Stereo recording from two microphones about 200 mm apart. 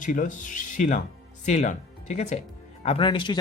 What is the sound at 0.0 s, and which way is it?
Speech, 40° left (ahead or behind).